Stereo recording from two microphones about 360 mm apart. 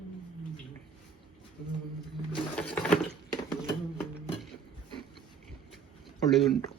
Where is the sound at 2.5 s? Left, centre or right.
Centre.